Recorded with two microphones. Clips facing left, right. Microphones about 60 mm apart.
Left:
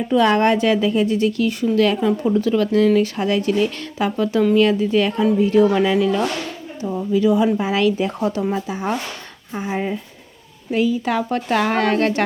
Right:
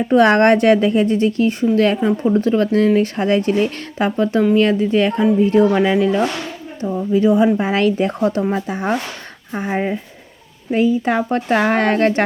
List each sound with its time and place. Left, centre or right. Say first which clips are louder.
0.1 s a woman's voice: right 4 dB; right
0.9 s speech: right 2 dB; right
5.7 s speech: right 2 dB; right
6.8 s speech: right 3 dB; centre
7.1 s a woman's voice: right 3 dB; right
9.7 s speech: right 3 dB; right